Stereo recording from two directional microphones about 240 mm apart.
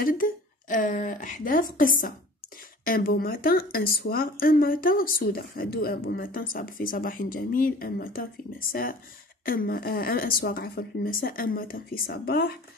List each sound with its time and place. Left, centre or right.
0.0 s a woman's voice: left